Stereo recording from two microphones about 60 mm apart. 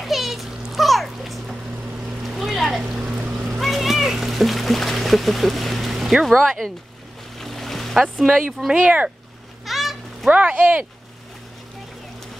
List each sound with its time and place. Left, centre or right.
0.0 s a sound: centre
2.2 s boat: centre
2.8 s a sound: centre
3.4 s splash: centre
7.3 s boat: centre
8.7 s speech: right
9.7 s honk: centre
10.3 s speech: right